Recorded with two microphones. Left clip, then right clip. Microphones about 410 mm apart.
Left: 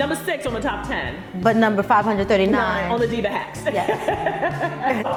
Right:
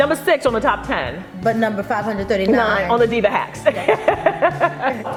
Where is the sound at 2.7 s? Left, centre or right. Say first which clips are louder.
Right 5 dB; right.